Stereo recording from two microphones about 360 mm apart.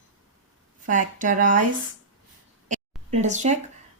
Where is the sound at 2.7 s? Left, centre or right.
Centre.